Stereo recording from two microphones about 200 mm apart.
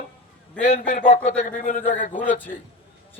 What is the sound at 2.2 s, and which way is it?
Speech, 10° left (ahead or behind).